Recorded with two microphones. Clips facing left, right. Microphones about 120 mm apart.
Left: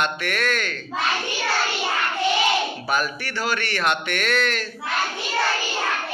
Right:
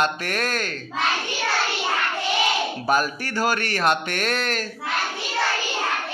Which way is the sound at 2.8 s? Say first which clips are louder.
Right 3 dB; 40° right (ahead or behind).